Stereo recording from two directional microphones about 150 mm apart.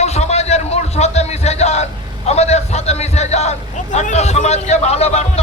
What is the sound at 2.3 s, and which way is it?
A man's voice, 45° left (ahead or behind).